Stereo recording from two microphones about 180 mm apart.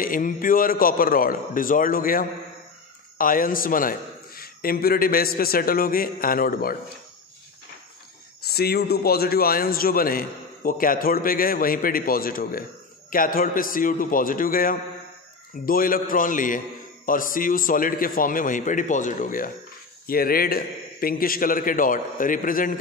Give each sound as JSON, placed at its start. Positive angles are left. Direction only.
{"t": 0.0, "sound": "a man's voice", "side_deg": 50}
{"t": 8.5, "sound": "a man's voice", "side_deg": 60}